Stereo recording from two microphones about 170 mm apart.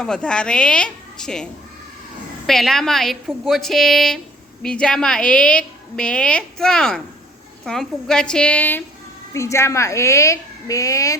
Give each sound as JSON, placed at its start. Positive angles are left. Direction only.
{"t": 0.0, "sound": "a woman's voice", "side_deg": 5}
{"t": 2.5, "sound": "a woman's voice", "side_deg": 0}